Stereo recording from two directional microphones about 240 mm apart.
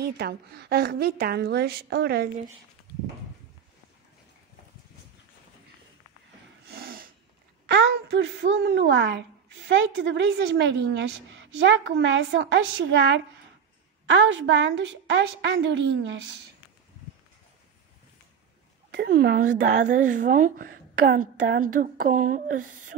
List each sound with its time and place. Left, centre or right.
0.0 s a woman's voice: right
6.7 s snort: right
7.6 s a woman's voice: right
18.9 s a woman's voice: right